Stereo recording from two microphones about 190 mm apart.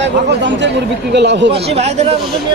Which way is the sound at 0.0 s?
70° right (ahead or behind).